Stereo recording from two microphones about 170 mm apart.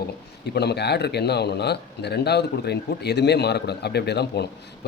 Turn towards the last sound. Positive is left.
turn(degrees=75)  # may be behind; listen again after turning